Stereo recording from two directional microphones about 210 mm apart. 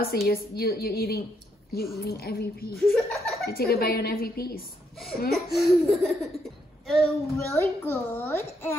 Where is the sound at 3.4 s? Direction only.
45° left (ahead or behind).